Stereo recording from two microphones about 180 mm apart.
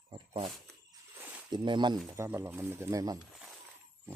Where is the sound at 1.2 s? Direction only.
10° right (ahead or behind).